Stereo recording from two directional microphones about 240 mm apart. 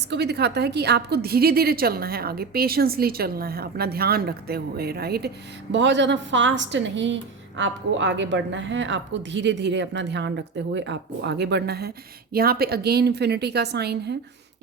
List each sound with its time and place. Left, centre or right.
0.1 s a woman's voice: right